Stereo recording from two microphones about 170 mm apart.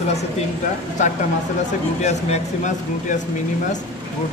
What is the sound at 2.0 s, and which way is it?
Speech, 45° left (ahead or behind).